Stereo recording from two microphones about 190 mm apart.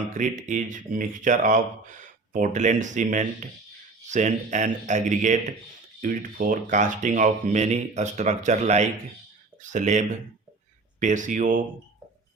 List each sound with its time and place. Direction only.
0.1 s speech: 40° right (ahead or behind)